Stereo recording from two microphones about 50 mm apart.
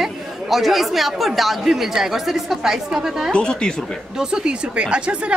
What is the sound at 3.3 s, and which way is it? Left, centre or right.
Speech, centre.